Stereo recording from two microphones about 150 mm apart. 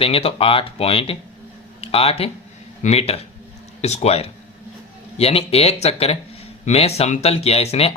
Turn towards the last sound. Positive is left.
turn(degrees=40)  # may be behind; listen again after turning